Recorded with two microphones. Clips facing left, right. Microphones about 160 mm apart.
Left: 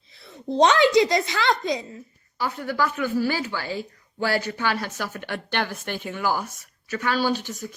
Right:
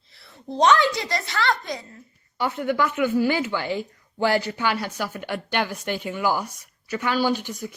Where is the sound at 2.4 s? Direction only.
25° right (ahead or behind).